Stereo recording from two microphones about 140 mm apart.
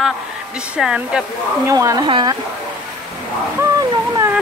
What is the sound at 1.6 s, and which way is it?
Speech, 25° right (ahead or behind).